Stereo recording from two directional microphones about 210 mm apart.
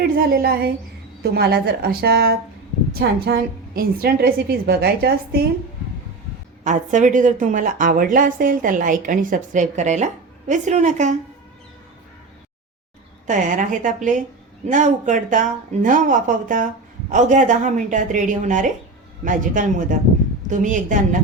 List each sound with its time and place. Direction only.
0.0 s a woman's voice: 45° right (ahead or behind)
6.7 s a woman's voice: 35° right (ahead or behind)
13.2 s a woman's voice: 35° right (ahead or behind)